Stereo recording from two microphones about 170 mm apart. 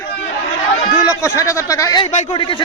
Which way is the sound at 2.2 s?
30° left (ahead or behind).